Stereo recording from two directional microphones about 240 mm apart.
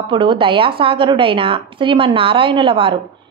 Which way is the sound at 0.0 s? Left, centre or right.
Centre.